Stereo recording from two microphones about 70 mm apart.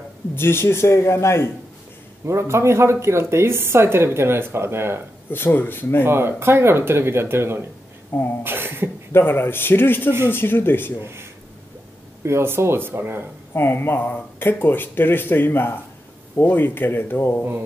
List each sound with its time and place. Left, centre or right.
0.4 s speech: left
2.2 s speech: right
5.3 s speech: left
6.0 s speech: right
8.1 s speech: left
8.5 s beatboxing: right
9.1 s speech: left
11.0 s speech: right
13.5 s speech: left